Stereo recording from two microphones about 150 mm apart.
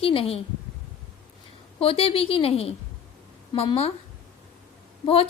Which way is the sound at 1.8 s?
40° left (ahead or behind).